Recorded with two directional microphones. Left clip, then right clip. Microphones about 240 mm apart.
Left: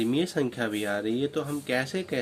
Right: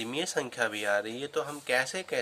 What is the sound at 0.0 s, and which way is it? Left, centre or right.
Speech, centre.